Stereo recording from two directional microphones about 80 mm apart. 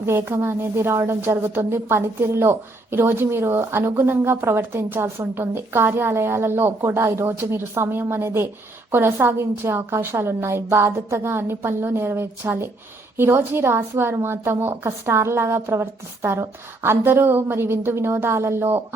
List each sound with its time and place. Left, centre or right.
0.0 s a woman's voice: right